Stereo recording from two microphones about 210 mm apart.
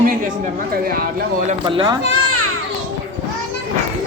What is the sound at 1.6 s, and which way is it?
Speech, 20° right (ahead or behind).